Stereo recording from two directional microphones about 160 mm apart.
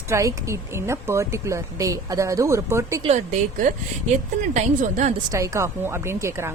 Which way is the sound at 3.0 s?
40° right (ahead or behind).